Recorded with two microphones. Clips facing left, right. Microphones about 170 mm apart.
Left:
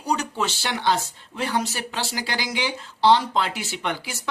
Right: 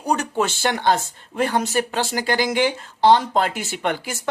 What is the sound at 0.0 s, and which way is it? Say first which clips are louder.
Speech: right 4 dB; 50° right (ahead or behind).